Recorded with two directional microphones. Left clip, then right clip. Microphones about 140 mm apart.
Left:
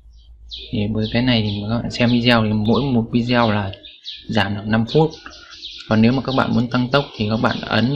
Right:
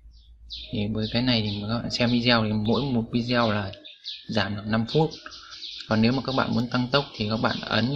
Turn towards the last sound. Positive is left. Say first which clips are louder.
# left 6 dB
turn(degrees=0)  # may be behind; listen again after turning